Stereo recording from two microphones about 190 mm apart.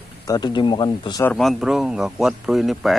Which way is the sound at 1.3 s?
Centre (ahead or behind).